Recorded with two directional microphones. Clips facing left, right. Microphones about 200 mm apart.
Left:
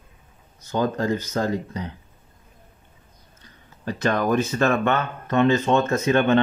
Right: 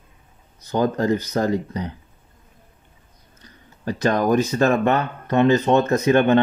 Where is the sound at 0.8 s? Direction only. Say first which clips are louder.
Right 3 dB; 15° right (ahead or behind).